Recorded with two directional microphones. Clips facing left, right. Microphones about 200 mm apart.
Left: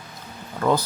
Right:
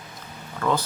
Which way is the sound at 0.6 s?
35° left (ahead or behind).